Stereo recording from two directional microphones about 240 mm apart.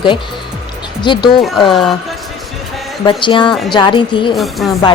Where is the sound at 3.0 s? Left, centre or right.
Centre.